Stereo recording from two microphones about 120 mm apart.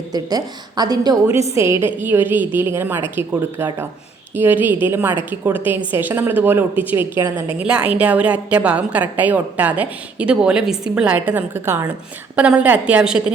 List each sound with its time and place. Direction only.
0.1 s a woman's voice: 35° right (ahead or behind); by 13.3 s 5° right (ahead or behind)